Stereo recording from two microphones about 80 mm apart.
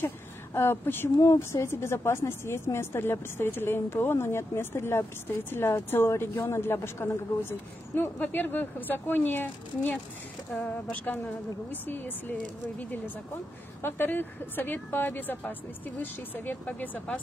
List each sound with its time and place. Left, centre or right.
0.6 s a woman's voice: left
1.2 s a woman's voice: left; by 17.2 s centre